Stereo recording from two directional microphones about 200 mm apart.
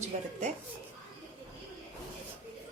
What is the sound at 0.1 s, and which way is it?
Speech, 40° right (ahead or behind).